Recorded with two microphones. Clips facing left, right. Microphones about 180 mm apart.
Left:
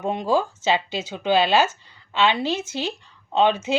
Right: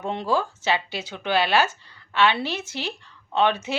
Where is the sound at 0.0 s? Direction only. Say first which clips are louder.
Left 3 dB; 15° left (ahead or behind).